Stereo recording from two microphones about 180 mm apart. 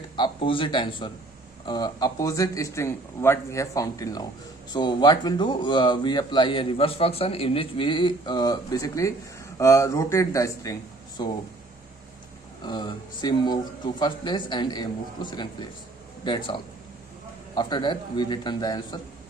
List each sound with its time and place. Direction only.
0.2 s a man's voice: 30° left (ahead or behind)
12.6 s a man's voice: 25° left (ahead or behind)